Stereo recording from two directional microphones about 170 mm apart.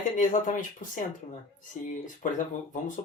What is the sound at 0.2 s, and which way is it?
Speech, 50° left (ahead or behind).